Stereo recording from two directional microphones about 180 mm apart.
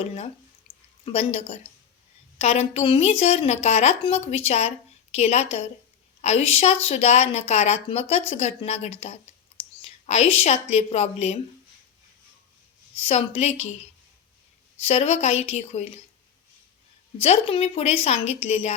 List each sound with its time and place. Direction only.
1.0 s a woman's voice: 35° left (ahead or behind)
13.0 s speech: 35° left (ahead or behind)
14.8 s speech: 35° left (ahead or behind)
17.2 s speech: 35° left (ahead or behind)